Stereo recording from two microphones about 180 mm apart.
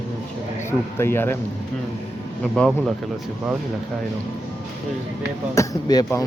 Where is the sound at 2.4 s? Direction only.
5° left (ahead or behind).